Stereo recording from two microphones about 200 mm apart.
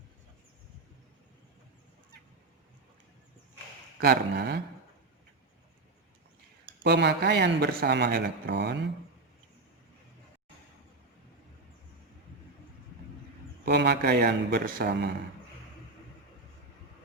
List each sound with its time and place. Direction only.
4.0 s speech: 50° right (ahead or behind)
6.8 s a man's voice: 55° right (ahead or behind)
13.7 s speech: 55° right (ahead or behind)